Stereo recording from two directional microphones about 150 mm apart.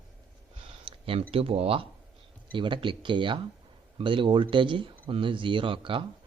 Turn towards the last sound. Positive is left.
turn(degrees=-35)  # may be behind; listen again after turning